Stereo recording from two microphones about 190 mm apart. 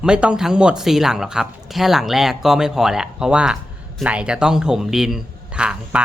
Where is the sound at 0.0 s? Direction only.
5° right (ahead or behind).